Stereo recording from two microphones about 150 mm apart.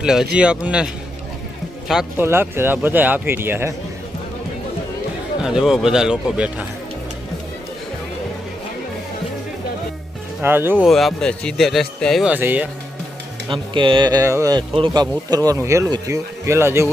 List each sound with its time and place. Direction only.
0.0 s speech: 5° right (ahead or behind)
2.1 s speech: 15° right (ahead or behind)
5.4 s speech: 5° right (ahead or behind)
10.4 s speech: 15° right (ahead or behind)
10.8 s speech: centre (ahead or behind)
12.3 s speech: 10° right (ahead or behind)
13.5 s speech: 35° right (ahead or behind)
14.7 s speech: 35° right (ahead or behind)
15.3 s speech: 25° right (ahead or behind)